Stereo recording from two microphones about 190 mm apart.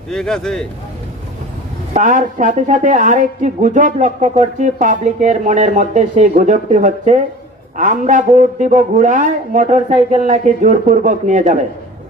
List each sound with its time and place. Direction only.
0.1 s speech: 5° left (ahead or behind)
1.9 s a woman's voice: 40° right (ahead or behind)